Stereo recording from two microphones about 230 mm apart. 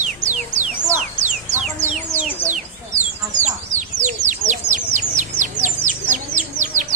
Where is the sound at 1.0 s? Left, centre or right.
Right.